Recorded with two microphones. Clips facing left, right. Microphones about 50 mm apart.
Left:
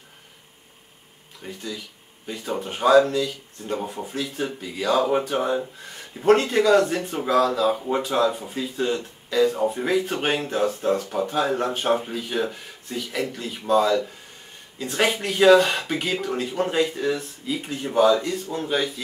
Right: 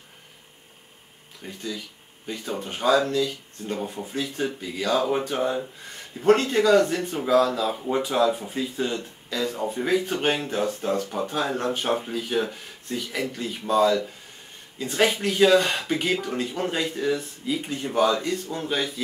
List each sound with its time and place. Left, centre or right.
1.4 s speech: centre
9.8 s speech: centre